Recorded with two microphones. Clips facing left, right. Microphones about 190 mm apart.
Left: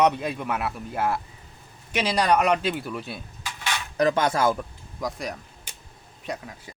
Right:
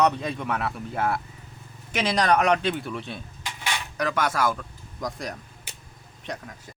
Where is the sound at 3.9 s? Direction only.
30° left (ahead or behind).